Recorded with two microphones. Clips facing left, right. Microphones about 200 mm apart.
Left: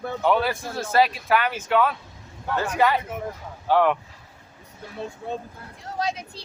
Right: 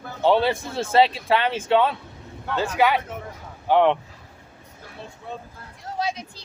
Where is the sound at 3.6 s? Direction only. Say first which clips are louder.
Right 2 dB; 20° right (ahead or behind).